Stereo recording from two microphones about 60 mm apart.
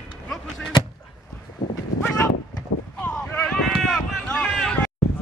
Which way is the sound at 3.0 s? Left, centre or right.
Left.